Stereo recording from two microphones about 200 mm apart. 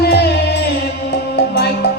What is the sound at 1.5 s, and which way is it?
Music, 55° left (ahead or behind).